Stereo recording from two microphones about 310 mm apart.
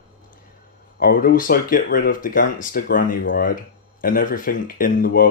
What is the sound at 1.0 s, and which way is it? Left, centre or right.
Speech, left.